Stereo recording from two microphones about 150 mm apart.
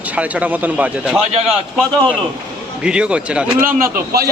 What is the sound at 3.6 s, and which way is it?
Speech, 75° right (ahead or behind).